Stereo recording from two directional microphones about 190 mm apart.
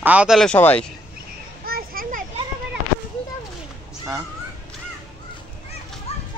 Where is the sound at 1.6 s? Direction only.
50° right (ahead or behind).